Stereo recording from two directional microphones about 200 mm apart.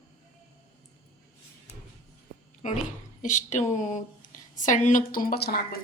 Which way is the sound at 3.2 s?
40° left (ahead or behind).